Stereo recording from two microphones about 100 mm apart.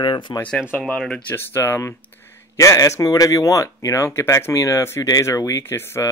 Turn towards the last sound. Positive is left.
turn(degrees=25)  # may be behind; listen again after turning